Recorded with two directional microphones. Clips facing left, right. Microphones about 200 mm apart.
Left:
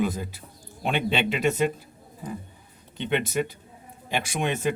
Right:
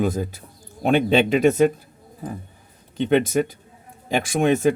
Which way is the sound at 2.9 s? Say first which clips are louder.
Right 7 dB; 40° right (ahead or behind).